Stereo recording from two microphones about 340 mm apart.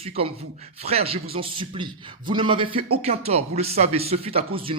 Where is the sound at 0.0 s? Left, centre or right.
Centre.